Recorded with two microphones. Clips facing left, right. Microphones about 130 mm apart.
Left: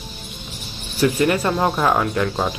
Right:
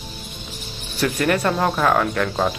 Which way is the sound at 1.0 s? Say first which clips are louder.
Left 2 dB; 10° left (ahead or behind).